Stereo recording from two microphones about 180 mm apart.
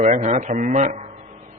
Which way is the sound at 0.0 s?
40° right (ahead or behind).